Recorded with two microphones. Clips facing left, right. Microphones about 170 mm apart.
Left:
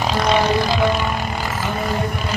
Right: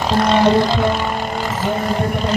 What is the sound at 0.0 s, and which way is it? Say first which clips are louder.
Vehicle: right 4 dB; 5° left (ahead or behind).